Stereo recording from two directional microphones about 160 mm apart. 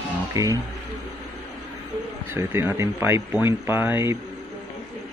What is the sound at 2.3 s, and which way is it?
Speech, 15° right (ahead or behind).